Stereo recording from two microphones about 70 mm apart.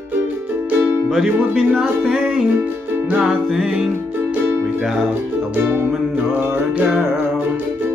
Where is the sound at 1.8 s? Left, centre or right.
Centre.